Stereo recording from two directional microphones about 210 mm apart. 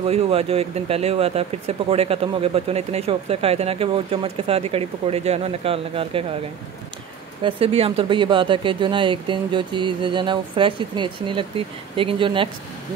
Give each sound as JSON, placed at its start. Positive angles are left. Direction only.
{"t": 0.0, "sound": "speech", "side_deg": -30}
{"t": 7.4, "sound": "speech", "side_deg": -25}